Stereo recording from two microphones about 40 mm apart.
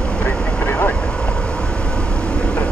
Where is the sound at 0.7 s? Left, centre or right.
Left.